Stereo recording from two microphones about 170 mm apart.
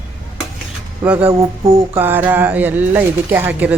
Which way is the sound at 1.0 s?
10° right (ahead or behind).